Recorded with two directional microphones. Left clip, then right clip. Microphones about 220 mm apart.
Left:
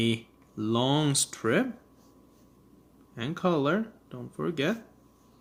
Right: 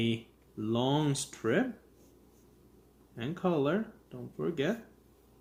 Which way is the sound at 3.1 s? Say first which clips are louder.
Left 4 dB; 40° left (ahead or behind).